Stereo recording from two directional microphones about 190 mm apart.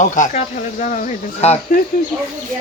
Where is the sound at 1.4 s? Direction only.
35° left (ahead or behind).